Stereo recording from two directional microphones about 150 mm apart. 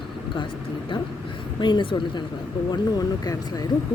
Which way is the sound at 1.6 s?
30° left (ahead or behind).